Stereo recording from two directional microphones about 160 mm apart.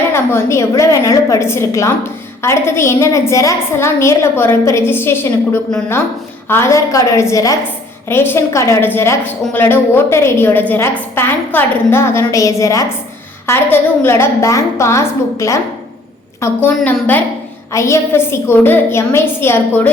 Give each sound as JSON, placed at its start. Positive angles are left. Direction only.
{"t": 0.1, "sound": "a woman's voice", "side_deg": 15}
{"t": 6.5, "sound": "a woman's voice", "side_deg": 15}